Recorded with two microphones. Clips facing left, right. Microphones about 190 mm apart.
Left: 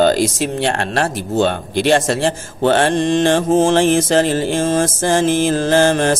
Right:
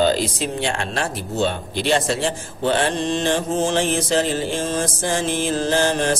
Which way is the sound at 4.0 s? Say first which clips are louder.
Left 6 dB; 85° left.